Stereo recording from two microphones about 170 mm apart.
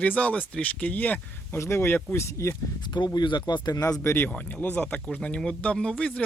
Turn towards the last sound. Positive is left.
turn(degrees=5)  # may be behind; listen again after turning